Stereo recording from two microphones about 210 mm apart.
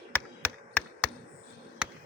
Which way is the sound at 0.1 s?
10° left (ahead or behind).